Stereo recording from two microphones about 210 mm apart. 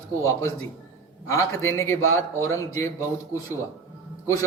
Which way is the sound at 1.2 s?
15° left (ahead or behind).